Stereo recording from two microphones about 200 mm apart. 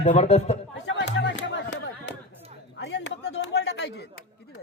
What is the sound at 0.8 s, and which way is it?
Music, 65° left (ahead or behind).